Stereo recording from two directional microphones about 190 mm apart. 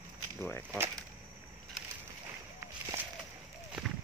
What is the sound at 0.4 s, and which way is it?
Speech, 10° left (ahead or behind).